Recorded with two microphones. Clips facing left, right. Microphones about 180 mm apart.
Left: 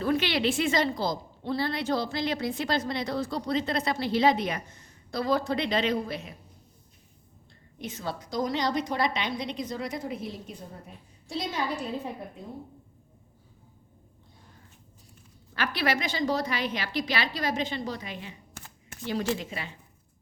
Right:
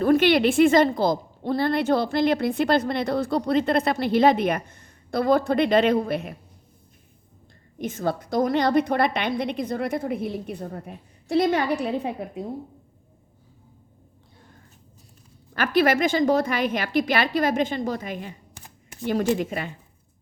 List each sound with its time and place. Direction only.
0.0 s a woman's voice: 50° right (ahead or behind)
7.8 s a woman's voice: 50° right (ahead or behind); by 12.5 s 75° right (ahead or behind)
15.5 s a woman's voice: 50° right (ahead or behind)
18.5 s shuffling cards: 15° right (ahead or behind)
19.3 s a woman's voice: 55° right (ahead or behind)